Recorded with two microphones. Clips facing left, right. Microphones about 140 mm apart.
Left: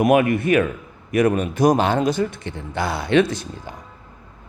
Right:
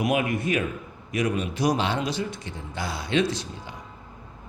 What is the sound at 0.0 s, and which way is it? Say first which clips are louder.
Speech: left 8 dB; 55° left (ahead or behind).